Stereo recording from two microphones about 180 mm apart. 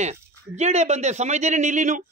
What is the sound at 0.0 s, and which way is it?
Speech, 40° right (ahead or behind).